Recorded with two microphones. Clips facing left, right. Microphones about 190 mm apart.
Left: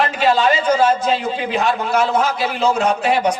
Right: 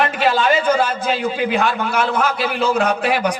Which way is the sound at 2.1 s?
60° right (ahead or behind).